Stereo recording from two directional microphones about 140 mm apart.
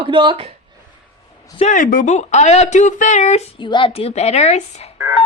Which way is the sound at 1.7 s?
75° left (ahead or behind).